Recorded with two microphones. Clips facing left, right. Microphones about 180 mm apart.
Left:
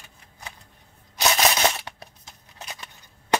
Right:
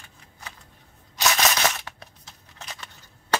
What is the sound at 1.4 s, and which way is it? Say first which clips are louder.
Crushing: left 3 dB; 20° left (ahead or behind).